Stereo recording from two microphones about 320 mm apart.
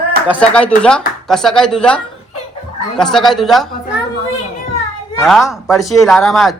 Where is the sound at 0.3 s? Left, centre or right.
Centre.